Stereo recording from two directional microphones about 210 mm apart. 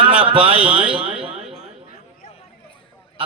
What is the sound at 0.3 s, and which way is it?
Speech, 25° right (ahead or behind).